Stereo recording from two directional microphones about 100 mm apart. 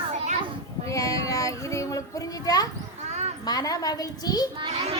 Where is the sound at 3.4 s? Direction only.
40° left (ahead or behind).